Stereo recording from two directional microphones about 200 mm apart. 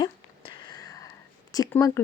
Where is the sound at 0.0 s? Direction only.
25° left (ahead or behind).